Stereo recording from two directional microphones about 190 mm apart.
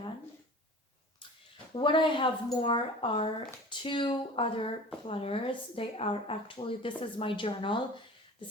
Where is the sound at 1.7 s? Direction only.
25° left (ahead or behind).